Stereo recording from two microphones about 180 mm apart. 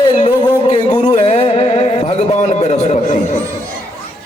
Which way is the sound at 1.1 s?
40° left (ahead or behind).